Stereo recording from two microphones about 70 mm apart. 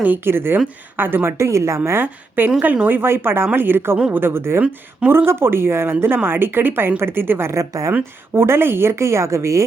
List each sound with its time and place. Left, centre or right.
0.0 s a woman's voice: right
7.6 s speech: right
8.3 s a woman's voice: right